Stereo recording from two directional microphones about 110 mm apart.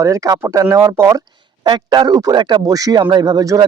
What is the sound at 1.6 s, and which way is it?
Speech, 40° right (ahead or behind).